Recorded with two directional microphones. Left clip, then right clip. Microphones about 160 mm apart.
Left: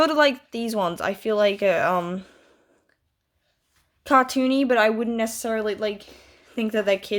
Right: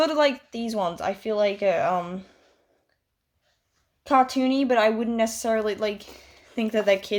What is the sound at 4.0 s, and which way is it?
A woman's voice, 40° left (ahead or behind).